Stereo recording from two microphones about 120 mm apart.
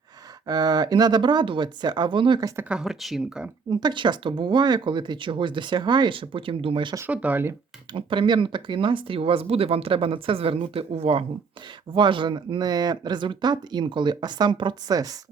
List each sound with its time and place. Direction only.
0.4 s speech: 35° right (ahead or behind)
2.6 s speech: 10° right (ahead or behind)
3.7 s speech: 35° right (ahead or behind)
7.1 s speech: 10° right (ahead or behind)
7.9 s speech: 45° right (ahead or behind)
11.9 s speech: 40° right (ahead or behind)